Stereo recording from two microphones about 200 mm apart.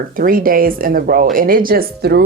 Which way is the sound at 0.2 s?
45° right (ahead or behind).